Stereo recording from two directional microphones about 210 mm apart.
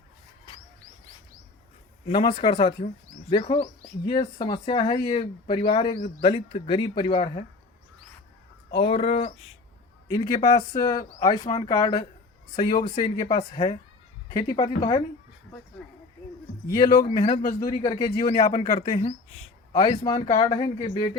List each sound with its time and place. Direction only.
2.0 s speech: 25° left (ahead or behind)
8.8 s speech: 30° left (ahead or behind)
10.1 s speech: 20° left (ahead or behind)
16.7 s a man's voice: 20° left (ahead or behind)
18.6 s speech: 25° left (ahead or behind)
18.9 s a man's voice: 35° left (ahead or behind)
19.7 s speech: 20° left (ahead or behind)